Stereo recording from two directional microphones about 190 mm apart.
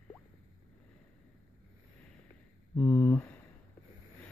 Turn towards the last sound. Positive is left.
turn(degrees=10)  # may be behind; listen again after turning